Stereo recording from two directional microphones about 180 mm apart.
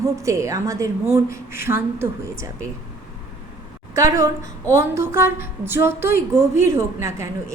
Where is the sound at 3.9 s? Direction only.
15° right (ahead or behind).